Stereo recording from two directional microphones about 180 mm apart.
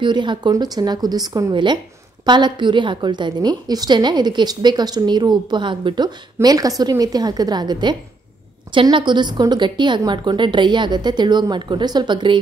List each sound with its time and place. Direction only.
0.0 s a woman's voice: 25° right (ahead or behind)